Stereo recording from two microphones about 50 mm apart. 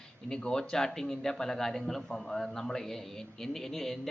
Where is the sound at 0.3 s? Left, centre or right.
Centre.